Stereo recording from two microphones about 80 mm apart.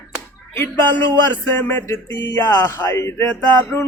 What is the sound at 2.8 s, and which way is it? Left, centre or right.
Speech, left.